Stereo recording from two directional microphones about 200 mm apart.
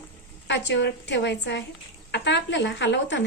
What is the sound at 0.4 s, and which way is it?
A woman's voice, 60° left (ahead or behind).